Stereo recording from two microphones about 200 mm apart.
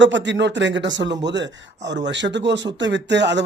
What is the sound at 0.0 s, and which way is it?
A man's voice, 65° right (ahead or behind).